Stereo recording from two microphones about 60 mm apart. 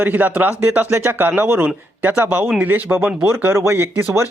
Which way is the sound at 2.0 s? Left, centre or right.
Right.